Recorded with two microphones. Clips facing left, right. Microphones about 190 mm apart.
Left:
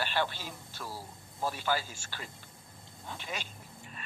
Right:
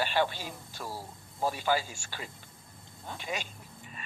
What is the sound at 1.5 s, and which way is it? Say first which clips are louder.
Speech: right 3 dB; 10° right (ahead or behind).